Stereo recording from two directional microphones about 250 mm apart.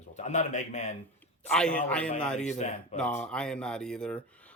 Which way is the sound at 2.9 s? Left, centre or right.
Centre.